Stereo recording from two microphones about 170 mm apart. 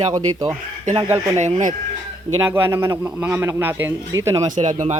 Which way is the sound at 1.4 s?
45° right (ahead or behind).